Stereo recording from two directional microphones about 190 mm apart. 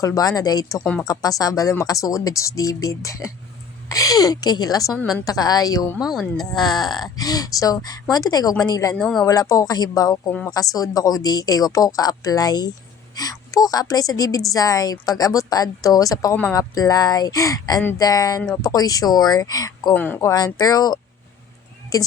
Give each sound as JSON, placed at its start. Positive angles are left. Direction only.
{"t": 0.0, "sound": "a woman's voice", "side_deg": 20}
{"t": 4.9, "sound": "speech", "side_deg": 0}
{"t": 5.2, "sound": "a woman's voice", "side_deg": 20}
{"t": 6.0, "sound": "speech", "side_deg": 0}
{"t": 6.6, "sound": "a woman's voice", "side_deg": 20}
{"t": 9.0, "sound": "speech", "side_deg": 5}
{"t": 9.2, "sound": "a woman's voice", "side_deg": 20}
{"t": 19.9, "sound": "speech", "side_deg": 10}
{"t": 20.3, "sound": "a woman's voice", "side_deg": 20}